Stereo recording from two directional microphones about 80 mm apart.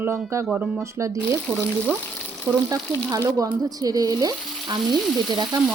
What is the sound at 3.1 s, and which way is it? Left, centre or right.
Speech, right.